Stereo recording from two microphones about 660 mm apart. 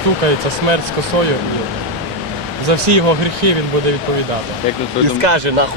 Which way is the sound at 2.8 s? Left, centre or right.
Right.